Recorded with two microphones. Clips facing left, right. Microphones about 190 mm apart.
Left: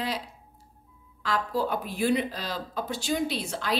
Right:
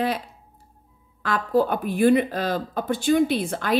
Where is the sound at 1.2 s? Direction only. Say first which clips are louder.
Right 7 dB; 55° right (ahead or behind).